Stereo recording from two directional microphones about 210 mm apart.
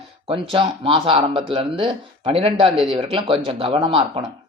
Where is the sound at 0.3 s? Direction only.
25° right (ahead or behind).